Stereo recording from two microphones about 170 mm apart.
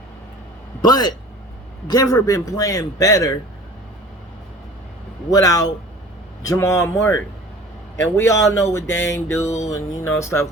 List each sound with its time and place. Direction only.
0.8 s a man's voice: 25° left (ahead or behind)
5.3 s a man's voice: 20° left (ahead or behind)